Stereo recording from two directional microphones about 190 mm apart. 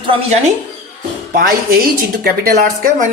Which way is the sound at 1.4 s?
50° right (ahead or behind).